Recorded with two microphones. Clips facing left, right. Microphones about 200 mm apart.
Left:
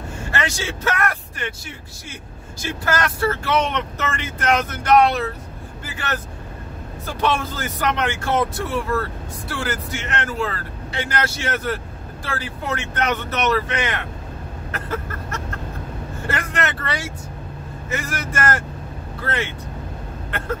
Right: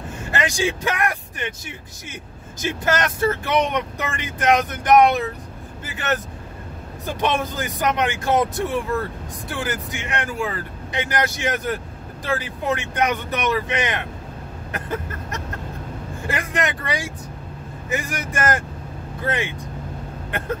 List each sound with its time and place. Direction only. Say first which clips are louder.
0.3 s speech: right 4 dB; 15° right (ahead or behind)
2.6 s speech: right 1 dB; 20° right (ahead or behind)
14.7 s a sound: even; 15° right (ahead or behind)
16.3 s speech: right 1 dB; 15° right (ahead or behind)